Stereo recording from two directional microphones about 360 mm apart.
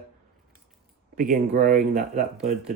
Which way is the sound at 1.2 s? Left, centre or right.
Right.